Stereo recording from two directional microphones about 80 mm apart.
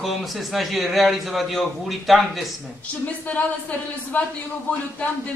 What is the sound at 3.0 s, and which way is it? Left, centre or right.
Speech, centre.